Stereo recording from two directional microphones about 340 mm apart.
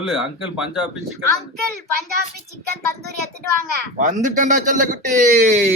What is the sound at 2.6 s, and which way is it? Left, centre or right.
Speech, right.